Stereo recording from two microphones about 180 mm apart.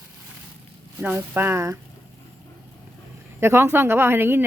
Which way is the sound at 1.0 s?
10° right (ahead or behind).